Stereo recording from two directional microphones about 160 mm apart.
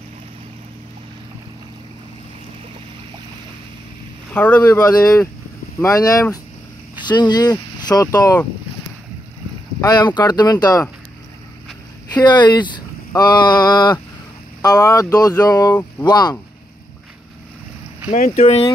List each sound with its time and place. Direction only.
4.3 s speech: 10° left (ahead or behind)
4.7 s speech: 25° left (ahead or behind)
9.8 s speech: 25° left (ahead or behind)
12.1 s speech: 25° left (ahead or behind)
18.1 s speech: 40° left (ahead or behind)